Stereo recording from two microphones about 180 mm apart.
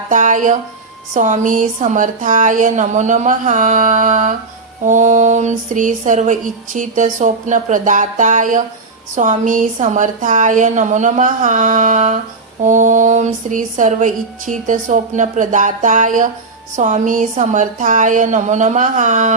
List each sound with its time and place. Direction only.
0.1 s speech: 45° right (ahead or behind)
1.1 s mantra: 45° right (ahead or behind)